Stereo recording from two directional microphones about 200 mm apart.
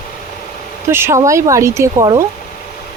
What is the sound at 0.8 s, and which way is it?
Speech, 10° right (ahead or behind).